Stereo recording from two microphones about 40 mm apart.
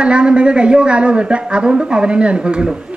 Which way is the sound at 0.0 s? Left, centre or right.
Right.